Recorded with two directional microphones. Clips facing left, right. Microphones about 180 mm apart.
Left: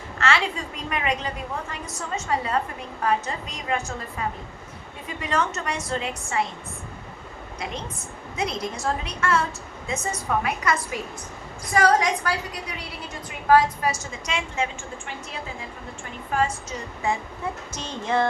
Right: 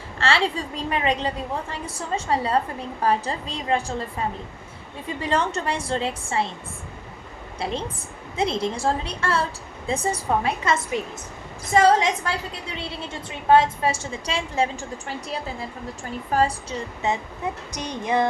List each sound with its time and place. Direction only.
0.2 s a woman's voice: 30° right (ahead or behind)
7.6 s a woman's voice: 30° right (ahead or behind)
17.0 s speech: 20° right (ahead or behind)